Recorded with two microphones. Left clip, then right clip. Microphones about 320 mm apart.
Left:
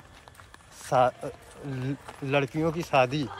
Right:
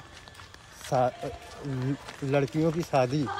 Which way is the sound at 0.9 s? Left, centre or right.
Centre.